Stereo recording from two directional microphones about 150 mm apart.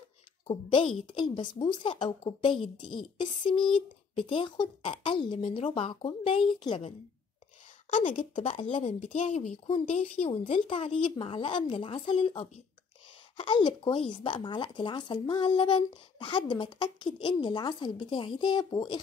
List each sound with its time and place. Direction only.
0.5 s speech: 35° left (ahead or behind)
8.2 s a woman's voice: 40° left (ahead or behind)